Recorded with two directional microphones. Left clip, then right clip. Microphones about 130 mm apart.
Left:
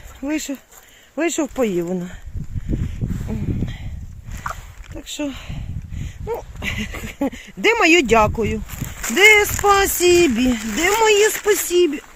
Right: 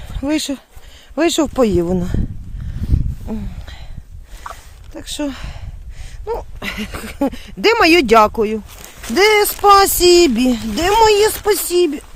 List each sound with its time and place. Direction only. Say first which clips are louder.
0.2 s speech: right 5 dB; 40° right (ahead or behind); by 2.1 s 55° right (ahead or behind)
3.3 s speech: right 5 dB; 20° right (ahead or behind)
5.2 s speech: right 3 dB; 20° right (ahead or behind)
6.2 s a sound: right 2 dB; 15° right (ahead or behind)
7.7 s speech: right 3 dB; 30° right (ahead or behind)
7.9 s speech: right 4 dB; 20° right (ahead or behind)
8.4 s speech: right 5 dB; 30° right (ahead or behind)
9.1 s speech: even; 40° right (ahead or behind)